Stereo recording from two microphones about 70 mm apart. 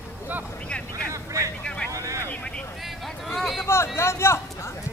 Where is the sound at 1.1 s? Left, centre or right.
Right.